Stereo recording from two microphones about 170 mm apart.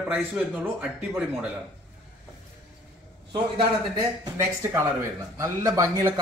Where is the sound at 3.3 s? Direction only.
25° right (ahead or behind).